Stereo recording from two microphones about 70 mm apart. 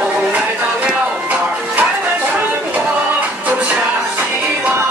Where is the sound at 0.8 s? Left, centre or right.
Right.